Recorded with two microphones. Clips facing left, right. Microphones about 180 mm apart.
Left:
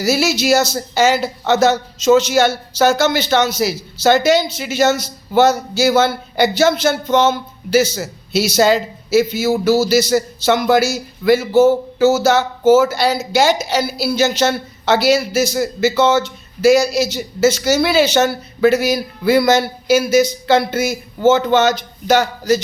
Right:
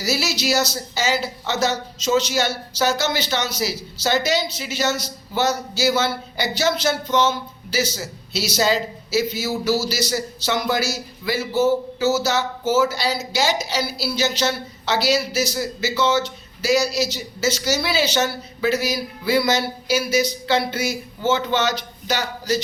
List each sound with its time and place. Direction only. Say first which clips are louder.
0.0 s speech: left 7 dB; 50° left (ahead or behind)